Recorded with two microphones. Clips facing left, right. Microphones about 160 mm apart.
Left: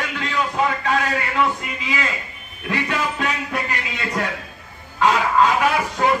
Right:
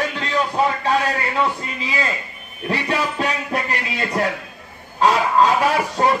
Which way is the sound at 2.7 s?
35° right (ahead or behind).